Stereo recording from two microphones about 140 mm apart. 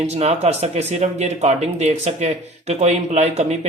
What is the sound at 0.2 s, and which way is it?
Speech, 50° right (ahead or behind).